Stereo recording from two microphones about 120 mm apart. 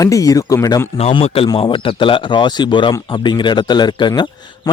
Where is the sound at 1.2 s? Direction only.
55° left (ahead or behind).